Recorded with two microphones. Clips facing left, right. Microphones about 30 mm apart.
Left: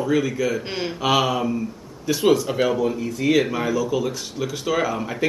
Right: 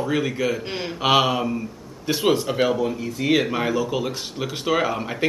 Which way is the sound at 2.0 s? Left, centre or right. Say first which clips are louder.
Left 2 dB; right.